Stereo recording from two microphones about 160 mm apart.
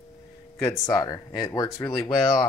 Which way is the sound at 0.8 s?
25° left (ahead or behind).